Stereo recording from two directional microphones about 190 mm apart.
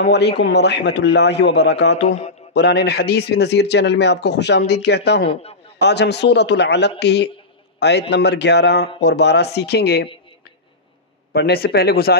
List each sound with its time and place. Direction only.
0.0 s a man's voice: 65° left (ahead or behind)
2.0 s speech: 35° left (ahead or behind)
2.5 s a man's voice: 60° left (ahead or behind)
11.3 s a man's voice: 55° left (ahead or behind)